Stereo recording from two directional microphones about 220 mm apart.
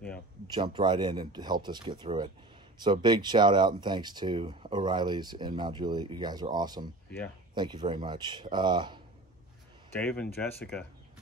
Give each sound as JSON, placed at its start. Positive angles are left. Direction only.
{"t": 0.5, "sound": "speech", "side_deg": -20}
{"t": 9.9, "sound": "speech", "side_deg": 5}